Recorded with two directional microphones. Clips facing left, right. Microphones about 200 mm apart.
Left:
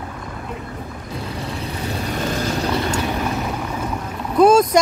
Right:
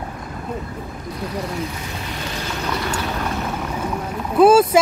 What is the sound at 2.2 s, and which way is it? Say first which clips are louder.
Vehicle: left 8 dB; 45° left (ahead or behind).